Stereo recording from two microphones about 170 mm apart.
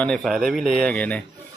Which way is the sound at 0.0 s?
5° left (ahead or behind).